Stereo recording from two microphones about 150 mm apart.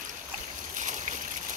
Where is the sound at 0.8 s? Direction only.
55° right (ahead or behind).